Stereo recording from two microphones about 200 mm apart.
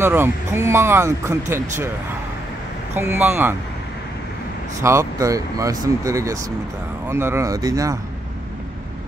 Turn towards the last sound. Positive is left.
turn(degrees=-15)  # may be behind; listen again after turning